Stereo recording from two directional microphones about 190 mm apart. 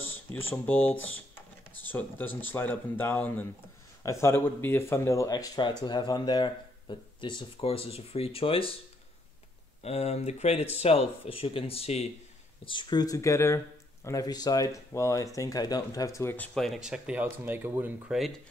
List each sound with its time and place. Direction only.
0.3 s speech: 10° left (ahead or behind); by 8.7 s 30° left (ahead or behind)
9.8 s speech: 35° left (ahead or behind); by 16.4 s 15° left (ahead or behind)
16.5 s speech: centre (ahead or behind)